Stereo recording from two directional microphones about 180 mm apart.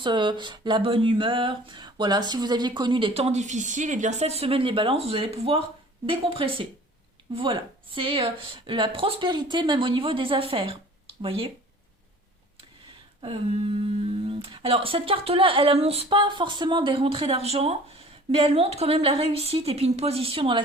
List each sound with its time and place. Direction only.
0.0 s speech: 25° right (ahead or behind)
13.2 s speech: 30° right (ahead or behind)